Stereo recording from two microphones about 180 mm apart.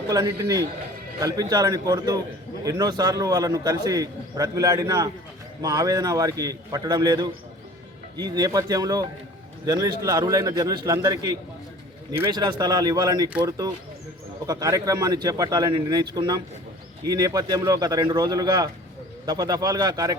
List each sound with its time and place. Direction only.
0.1 s a man's voice: 20° right (ahead or behind)